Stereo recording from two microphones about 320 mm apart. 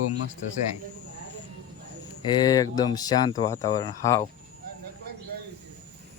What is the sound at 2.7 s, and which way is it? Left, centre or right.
Speech, centre.